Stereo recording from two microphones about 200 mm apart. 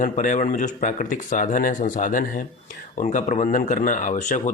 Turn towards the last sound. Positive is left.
turn(degrees=40)  # may be behind; listen again after turning